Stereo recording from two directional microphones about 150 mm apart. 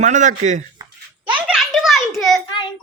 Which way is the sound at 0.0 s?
55° right (ahead or behind).